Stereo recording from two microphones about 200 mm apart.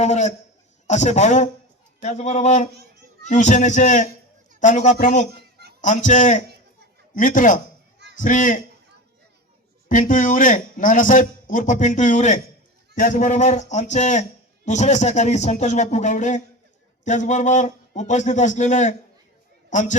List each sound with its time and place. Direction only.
0.0 s a man's voice: 35° left (ahead or behind)
5.3 s a sound: 55° right (ahead or behind)
5.8 s a man's voice: 40° left (ahead or behind)
9.9 s a man's voice: 40° left (ahead or behind)